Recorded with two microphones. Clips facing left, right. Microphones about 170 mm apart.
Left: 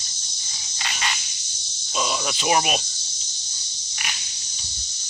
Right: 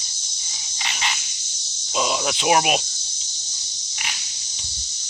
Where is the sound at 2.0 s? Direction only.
15° right (ahead or behind).